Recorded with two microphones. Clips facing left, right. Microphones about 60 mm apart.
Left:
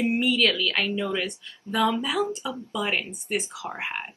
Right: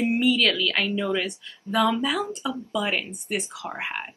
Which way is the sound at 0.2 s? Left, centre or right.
Centre.